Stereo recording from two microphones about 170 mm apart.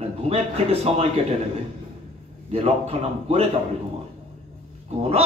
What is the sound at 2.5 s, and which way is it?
Speech, 35° right (ahead or behind).